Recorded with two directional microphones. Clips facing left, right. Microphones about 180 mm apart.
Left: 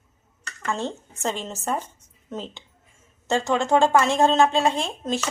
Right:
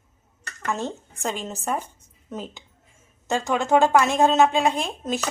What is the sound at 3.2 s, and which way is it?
Speech, 15° right (ahead or behind).